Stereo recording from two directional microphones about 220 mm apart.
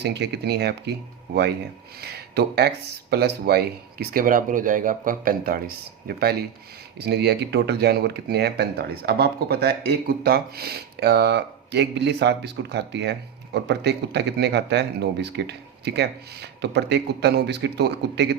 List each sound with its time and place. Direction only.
0.0 s speech: 50° right (ahead or behind)